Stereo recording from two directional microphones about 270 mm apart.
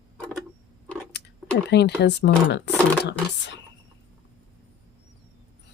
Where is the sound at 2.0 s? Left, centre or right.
Left.